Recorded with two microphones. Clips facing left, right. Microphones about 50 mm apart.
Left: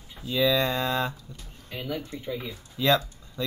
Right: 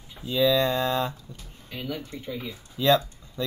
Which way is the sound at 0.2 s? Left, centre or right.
Right.